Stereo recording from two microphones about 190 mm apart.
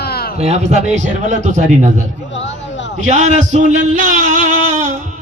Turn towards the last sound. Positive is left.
turn(degrees=-40)  # may be behind; listen again after turning